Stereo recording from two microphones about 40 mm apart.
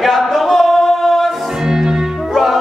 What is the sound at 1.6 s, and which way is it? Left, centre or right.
Music, centre.